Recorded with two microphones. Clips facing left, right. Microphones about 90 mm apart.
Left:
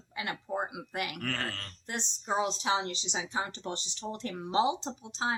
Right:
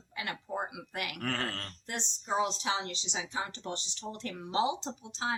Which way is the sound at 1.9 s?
20° left (ahead or behind).